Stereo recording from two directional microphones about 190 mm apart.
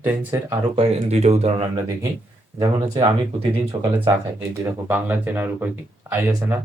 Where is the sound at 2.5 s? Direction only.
20° right (ahead or behind).